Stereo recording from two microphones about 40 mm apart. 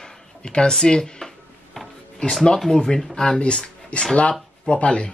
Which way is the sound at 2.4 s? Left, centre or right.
Centre.